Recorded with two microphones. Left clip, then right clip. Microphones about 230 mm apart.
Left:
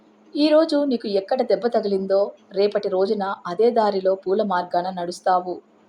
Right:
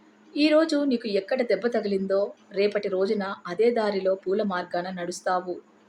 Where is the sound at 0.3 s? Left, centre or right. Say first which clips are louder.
Left 4 dB; centre.